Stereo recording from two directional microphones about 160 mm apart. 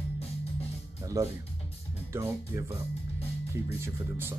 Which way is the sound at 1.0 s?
20° right (ahead or behind).